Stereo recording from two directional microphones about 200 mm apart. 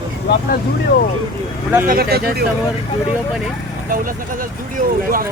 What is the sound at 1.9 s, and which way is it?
Speech, 50° right (ahead or behind).